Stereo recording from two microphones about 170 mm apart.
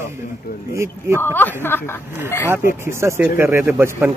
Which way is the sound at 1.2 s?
10° left (ahead or behind).